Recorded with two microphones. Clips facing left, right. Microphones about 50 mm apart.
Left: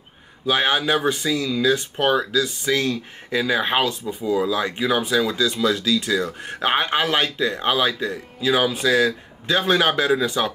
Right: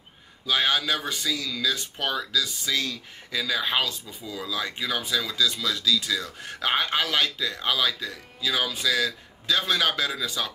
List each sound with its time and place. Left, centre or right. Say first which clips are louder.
0.5 s speech: left 5 dB; left